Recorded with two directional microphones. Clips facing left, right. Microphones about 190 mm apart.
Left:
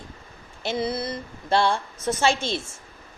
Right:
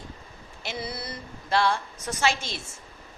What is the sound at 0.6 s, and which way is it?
A woman's voice, 25° left (ahead or behind).